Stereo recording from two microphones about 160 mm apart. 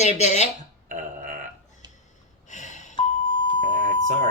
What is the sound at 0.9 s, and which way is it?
Burping, 55° right (ahead or behind).